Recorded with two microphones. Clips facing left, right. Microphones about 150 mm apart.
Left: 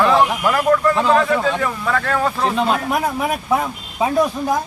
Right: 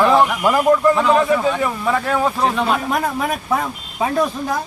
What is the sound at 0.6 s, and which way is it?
A man's voice, 20° right (ahead or behind).